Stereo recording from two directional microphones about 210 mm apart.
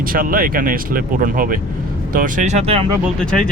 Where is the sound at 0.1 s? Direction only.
45° right (ahead or behind); by 2.9 s 25° right (ahead or behind).